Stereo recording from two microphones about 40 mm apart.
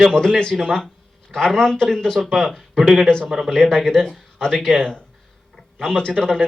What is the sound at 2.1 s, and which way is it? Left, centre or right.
Speech, centre.